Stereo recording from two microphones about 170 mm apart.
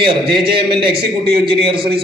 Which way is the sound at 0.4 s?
30° right (ahead or behind).